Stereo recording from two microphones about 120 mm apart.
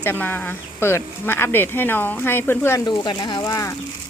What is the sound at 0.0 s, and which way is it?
Speech, 15° left (ahead or behind).